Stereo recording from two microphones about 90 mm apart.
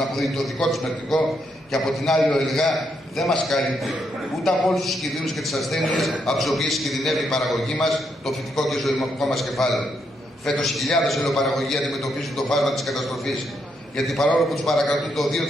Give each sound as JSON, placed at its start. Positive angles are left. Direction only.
{"t": 0.1, "sound": "a man's voice", "side_deg": 0}